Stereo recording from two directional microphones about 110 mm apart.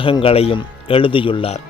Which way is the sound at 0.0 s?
55° left (ahead or behind).